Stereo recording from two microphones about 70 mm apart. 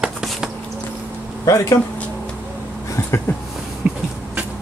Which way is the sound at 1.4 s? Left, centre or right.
Left.